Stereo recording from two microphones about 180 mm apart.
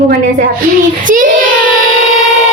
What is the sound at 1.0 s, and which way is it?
Child singing, 45° right (ahead or behind).